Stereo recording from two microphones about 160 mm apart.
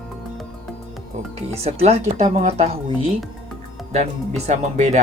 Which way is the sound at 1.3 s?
40° right (ahead or behind).